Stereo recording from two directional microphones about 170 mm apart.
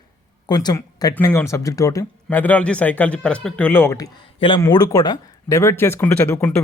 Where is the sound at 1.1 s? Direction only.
10° left (ahead or behind).